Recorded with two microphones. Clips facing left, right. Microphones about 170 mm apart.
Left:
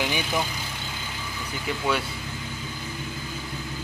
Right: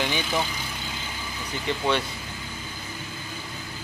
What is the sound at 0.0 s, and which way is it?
Speech, 15° left (ahead or behind).